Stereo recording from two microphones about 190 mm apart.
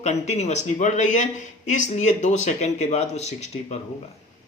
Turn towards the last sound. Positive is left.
turn(degrees=35)  # may be behind; listen again after turning